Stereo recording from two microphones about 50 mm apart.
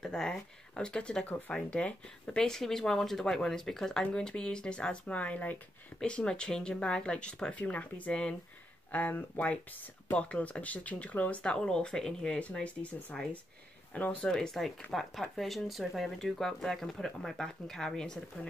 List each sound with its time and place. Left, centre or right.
0.0 s speech: centre
2.3 s speech: centre; by 5.6 s left
5.9 s speech: centre
11.4 s speech: centre